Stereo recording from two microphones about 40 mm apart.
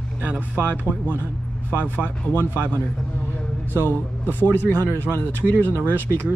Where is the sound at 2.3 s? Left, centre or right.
Left.